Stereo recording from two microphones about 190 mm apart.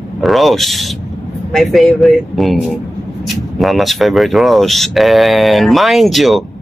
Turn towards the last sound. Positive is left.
turn(degrees=0)  # may be behind; listen again after turning